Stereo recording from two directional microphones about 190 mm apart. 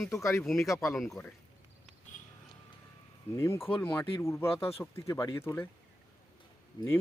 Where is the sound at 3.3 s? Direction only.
15° left (ahead or behind).